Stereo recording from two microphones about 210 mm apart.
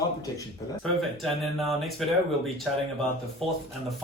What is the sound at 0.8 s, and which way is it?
Speech, centre (ahead or behind).